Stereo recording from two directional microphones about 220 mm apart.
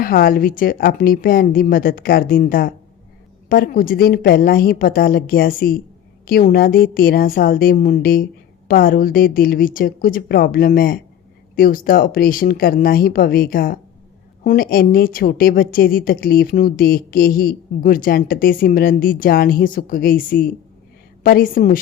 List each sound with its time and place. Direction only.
0.0 s a woman's voice: 40° left (ahead or behind)